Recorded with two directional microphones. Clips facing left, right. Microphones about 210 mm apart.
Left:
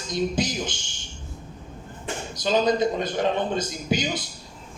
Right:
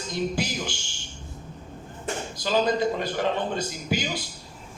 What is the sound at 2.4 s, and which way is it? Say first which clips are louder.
A man's voice: left 2 dB; 20° left (ahead or behind).